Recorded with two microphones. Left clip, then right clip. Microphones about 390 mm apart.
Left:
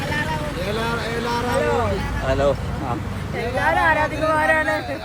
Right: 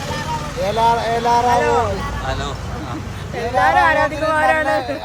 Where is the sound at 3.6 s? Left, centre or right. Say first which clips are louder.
Right 3 dB; right.